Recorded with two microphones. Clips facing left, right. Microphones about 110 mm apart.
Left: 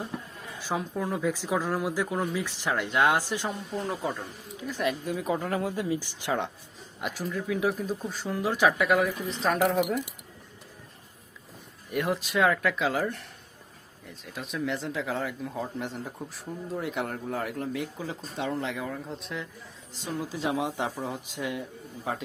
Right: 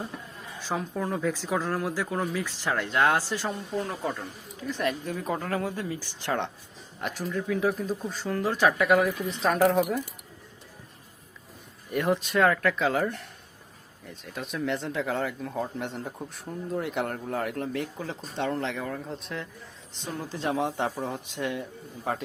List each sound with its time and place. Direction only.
0.7 s speech: centre (ahead or behind)
1.3 s speech: 15° left (ahead or behind)
8.8 s speech: centre (ahead or behind)
11.9 s speech: centre (ahead or behind)
14.1 s speech: centre (ahead or behind)